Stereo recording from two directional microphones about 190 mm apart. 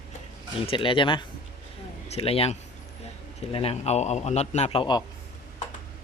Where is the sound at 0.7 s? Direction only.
25° left (ahead or behind).